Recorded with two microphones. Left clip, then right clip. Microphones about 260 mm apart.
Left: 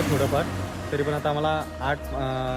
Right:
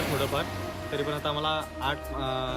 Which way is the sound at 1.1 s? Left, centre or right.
Centre.